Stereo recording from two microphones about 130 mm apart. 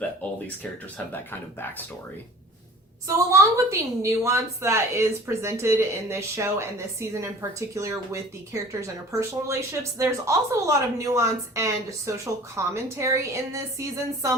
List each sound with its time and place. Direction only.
0.2 s speech: 10° left (ahead or behind)
3.1 s speech: 25° right (ahead or behind)